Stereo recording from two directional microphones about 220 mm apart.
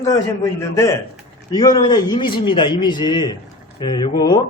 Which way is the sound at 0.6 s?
15° left (ahead or behind).